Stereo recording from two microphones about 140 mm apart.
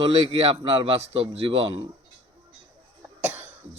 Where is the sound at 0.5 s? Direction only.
35° right (ahead or behind).